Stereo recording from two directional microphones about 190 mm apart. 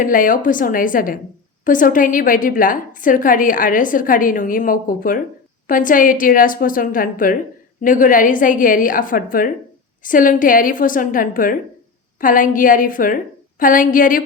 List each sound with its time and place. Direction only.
0.0 s a woman's voice: 45° left (ahead or behind)